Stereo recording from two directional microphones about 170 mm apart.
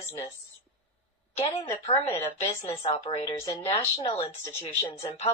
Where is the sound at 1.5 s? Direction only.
35° left (ahead or behind).